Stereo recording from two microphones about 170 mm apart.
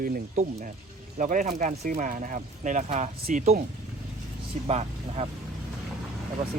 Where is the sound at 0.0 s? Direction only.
50° right (ahead or behind).